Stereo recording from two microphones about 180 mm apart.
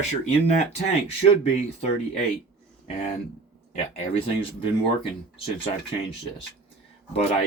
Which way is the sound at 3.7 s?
35° left (ahead or behind).